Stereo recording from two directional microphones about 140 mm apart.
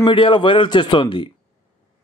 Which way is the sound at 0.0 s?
40° left (ahead or behind).